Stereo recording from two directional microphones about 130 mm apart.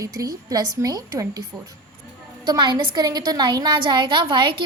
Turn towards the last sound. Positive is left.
turn(degrees=-40)  # may be behind; listen again after turning